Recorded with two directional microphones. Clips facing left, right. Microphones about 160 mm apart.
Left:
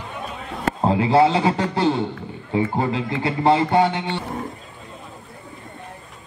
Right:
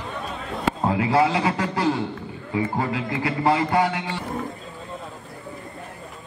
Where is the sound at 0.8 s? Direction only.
25° left (ahead or behind).